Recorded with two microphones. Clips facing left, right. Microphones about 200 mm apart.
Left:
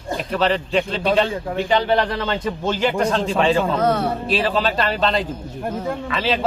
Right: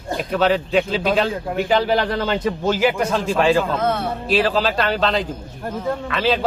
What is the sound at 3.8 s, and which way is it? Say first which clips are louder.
Speech: left 2 dB; 35° left (ahead or behind).